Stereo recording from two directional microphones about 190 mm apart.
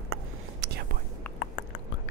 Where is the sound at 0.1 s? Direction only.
65° right (ahead or behind).